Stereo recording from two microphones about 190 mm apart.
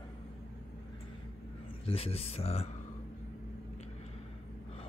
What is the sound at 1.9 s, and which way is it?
Speech, 30° left (ahead or behind).